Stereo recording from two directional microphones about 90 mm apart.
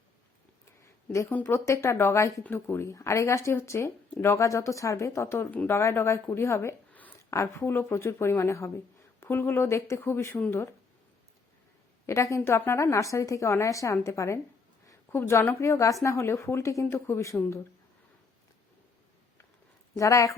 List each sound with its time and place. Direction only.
1.3 s speech: 20° left (ahead or behind)
1.5 s speech: 30° left (ahead or behind)
12.0 s speech: 35° left (ahead or behind)
20.0 s speech: 40° left (ahead or behind)